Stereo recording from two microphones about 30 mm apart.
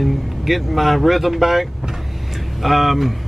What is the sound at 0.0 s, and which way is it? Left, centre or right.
Speech, centre.